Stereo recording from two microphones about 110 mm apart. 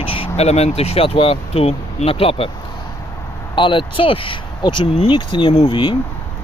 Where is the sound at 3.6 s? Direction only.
50° left (ahead or behind).